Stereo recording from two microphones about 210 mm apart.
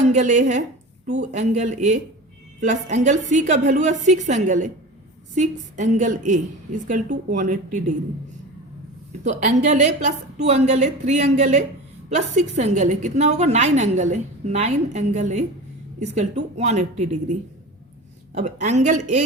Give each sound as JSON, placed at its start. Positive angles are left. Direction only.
{"t": 0.0, "sound": "a woman's voice", "side_deg": -35}
{"t": 9.2, "sound": "a woman's voice", "side_deg": -35}
{"t": 18.3, "sound": "a woman's voice", "side_deg": -35}